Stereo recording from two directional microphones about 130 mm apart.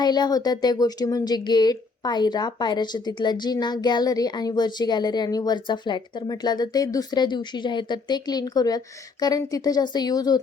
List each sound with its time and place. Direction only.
0.0 s speech: 30° left (ahead or behind)